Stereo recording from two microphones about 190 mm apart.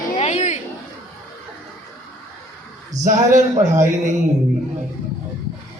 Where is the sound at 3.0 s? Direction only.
45° right (ahead or behind).